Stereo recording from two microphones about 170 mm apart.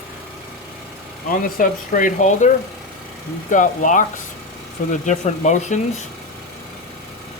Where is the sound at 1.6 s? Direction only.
50° left (ahead or behind).